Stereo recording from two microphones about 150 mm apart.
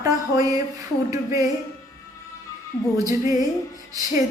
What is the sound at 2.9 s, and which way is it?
Music, 20° right (ahead or behind).